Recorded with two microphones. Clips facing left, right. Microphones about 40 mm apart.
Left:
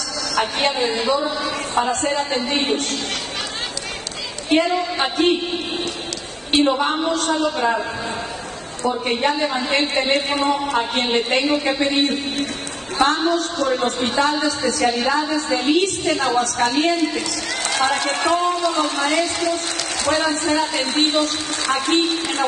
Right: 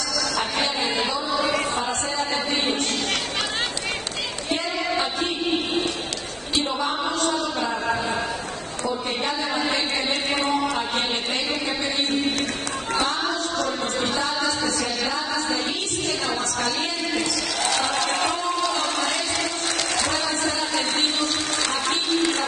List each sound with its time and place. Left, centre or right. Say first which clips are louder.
0.4 s music: left 7 dB; left
2.0 s a woman's voice: left 4 dB; left
4.5 s a sound: left 8 dB; left
6.5 s a woman's voice: left 7 dB; left
8.8 s a woman's voice: left 7 dB; left
20.1 s a woman's voice: left 6 dB; left
21.8 s a woman's voice: left 2 dB; left